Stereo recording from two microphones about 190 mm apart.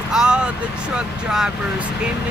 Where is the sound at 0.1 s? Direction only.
5° right (ahead or behind).